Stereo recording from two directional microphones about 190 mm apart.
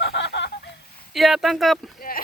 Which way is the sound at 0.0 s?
60° left (ahead or behind).